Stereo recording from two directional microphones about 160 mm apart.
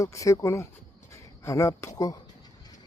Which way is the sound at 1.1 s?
15° left (ahead or behind).